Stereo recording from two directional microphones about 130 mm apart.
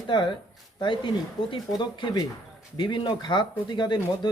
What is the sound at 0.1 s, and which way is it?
Speech, 35° left (ahead or behind).